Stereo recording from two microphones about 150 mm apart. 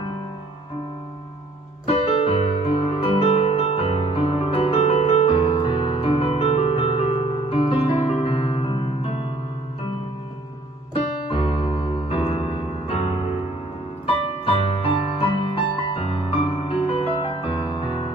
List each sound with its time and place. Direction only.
1.9 s music: 40° left (ahead or behind)
11.2 s music: 35° left (ahead or behind)